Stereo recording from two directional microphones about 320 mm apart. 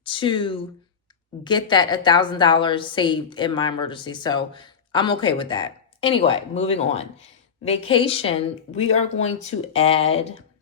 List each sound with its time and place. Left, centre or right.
0.0 s a woman's voice: centre